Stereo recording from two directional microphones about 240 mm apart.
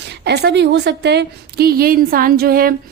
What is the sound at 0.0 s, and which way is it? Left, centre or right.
A woman's voice, right.